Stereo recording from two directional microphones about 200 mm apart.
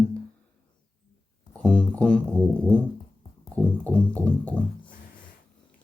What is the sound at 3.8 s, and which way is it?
Music, 5° left (ahead or behind).